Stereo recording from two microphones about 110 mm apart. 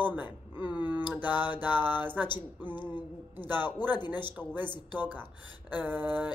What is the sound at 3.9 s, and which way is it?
Speech, 40° left (ahead or behind).